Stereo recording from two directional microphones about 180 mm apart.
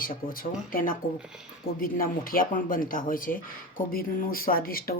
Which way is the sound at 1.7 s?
50° left (ahead or behind).